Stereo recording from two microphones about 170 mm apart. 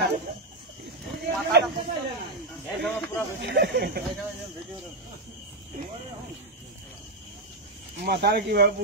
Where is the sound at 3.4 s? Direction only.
75° right (ahead or behind).